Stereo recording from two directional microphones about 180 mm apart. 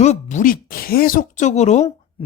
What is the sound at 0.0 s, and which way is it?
Speech, 40° left (ahead or behind).